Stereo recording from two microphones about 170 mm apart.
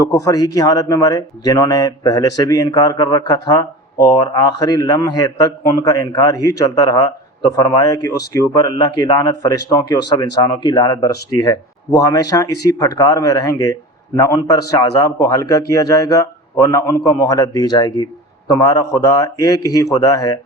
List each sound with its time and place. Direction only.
0.0 s speech: 20° left (ahead or behind)